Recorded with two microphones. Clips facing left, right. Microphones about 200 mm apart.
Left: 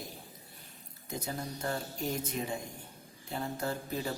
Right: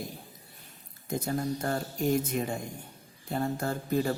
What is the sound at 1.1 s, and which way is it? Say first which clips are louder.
Speech: right 8 dB; 50° right (ahead or behind).